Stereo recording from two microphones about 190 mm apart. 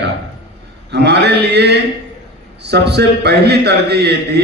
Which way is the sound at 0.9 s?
60° right (ahead or behind).